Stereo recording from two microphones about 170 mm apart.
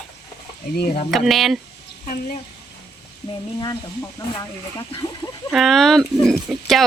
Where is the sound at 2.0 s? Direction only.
50° left (ahead or behind).